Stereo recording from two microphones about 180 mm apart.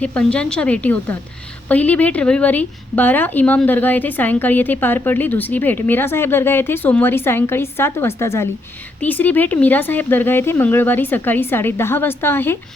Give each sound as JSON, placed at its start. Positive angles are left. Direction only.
{"t": 0.0, "sound": "a woman's voice", "side_deg": 5}